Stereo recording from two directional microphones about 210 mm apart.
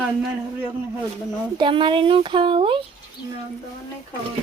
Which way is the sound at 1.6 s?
25° right (ahead or behind).